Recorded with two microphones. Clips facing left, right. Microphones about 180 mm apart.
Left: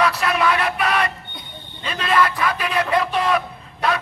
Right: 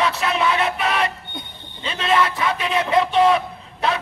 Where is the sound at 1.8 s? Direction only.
25° right (ahead or behind).